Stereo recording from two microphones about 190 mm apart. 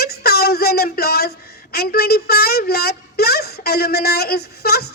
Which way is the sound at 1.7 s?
55° left (ahead or behind).